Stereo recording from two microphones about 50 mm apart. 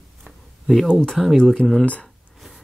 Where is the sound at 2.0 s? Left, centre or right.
Centre.